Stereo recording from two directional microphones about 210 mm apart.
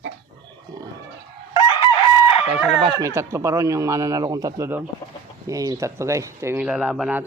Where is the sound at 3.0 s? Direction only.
15° right (ahead or behind).